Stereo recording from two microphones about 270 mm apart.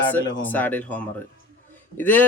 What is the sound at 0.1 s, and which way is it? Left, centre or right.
A man's voice, centre.